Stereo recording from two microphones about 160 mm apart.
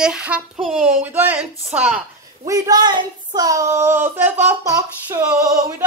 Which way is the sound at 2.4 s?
20° right (ahead or behind).